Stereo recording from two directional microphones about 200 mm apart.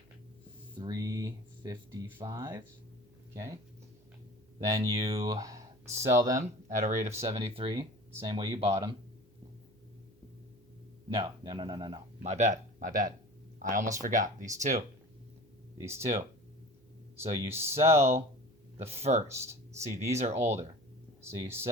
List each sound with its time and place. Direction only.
0.8 s speech: 20° right (ahead or behind)
4.6 s speech: 15° right (ahead or behind)
6.7 s speech: 35° right (ahead or behind)
7.0 s speech: 15° right (ahead or behind)
11.1 s speech: 20° right (ahead or behind)
12.2 s speech: 35° right (ahead or behind)
15.8 s speech: 15° right (ahead or behind)
17.5 s speech: 10° right (ahead or behind)
18.8 s speech: 30° right (ahead or behind)
19.3 s speech: 15° right (ahead or behind)
20.1 s speech: 35° right (ahead or behind)
21.2 s speech: 10° right (ahead or behind)